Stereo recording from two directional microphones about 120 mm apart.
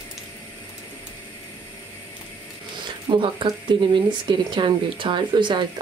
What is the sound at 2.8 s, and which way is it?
Speech, 40° right (ahead or behind).